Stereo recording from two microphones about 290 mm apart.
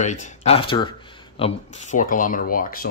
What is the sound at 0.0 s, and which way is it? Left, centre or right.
Speech, left.